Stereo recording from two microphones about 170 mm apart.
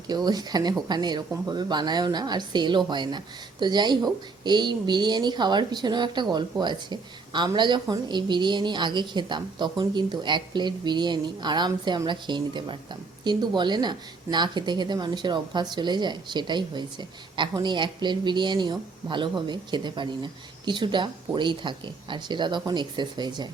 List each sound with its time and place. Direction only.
0.1 s speech: 25° right (ahead or behind)